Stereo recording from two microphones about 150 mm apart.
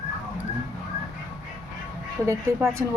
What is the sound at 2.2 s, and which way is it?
Speech, 20° right (ahead or behind).